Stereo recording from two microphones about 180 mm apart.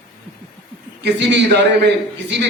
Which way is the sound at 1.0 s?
75° right (ahead or behind).